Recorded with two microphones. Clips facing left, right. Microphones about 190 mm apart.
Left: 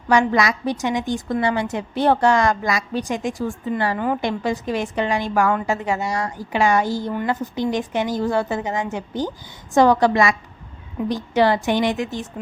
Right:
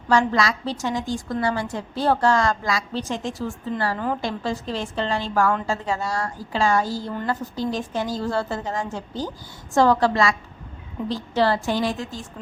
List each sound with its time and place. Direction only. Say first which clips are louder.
0.1 s a woman's voice: left 2 dB; 15° left (ahead or behind)